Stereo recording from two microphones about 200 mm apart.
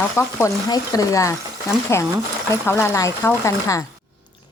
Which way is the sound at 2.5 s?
15° left (ahead or behind).